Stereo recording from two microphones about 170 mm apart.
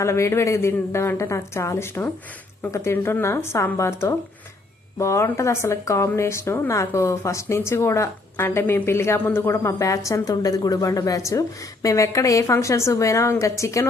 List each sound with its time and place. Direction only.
0.0 s speech: 15° left (ahead or behind)